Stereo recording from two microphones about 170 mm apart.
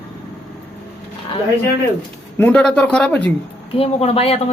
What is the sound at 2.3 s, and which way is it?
Speech, 10° left (ahead or behind).